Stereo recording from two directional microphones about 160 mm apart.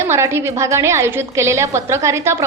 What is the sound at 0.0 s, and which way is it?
A woman's voice, 15° right (ahead or behind).